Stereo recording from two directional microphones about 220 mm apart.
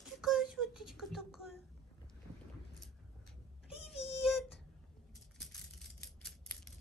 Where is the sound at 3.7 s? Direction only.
Centre (ahead or behind).